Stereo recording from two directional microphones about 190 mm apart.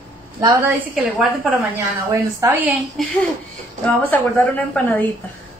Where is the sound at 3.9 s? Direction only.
10° left (ahead or behind).